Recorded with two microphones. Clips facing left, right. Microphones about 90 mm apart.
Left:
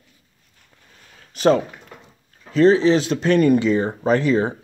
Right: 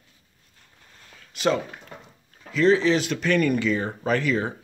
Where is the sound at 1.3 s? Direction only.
40° left (ahead or behind).